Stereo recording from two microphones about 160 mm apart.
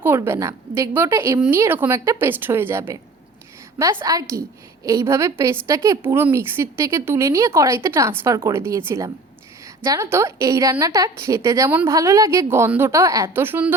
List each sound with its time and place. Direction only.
0.0 s speech: 15° right (ahead or behind)
4.0 s a woman's voice: 20° right (ahead or behind)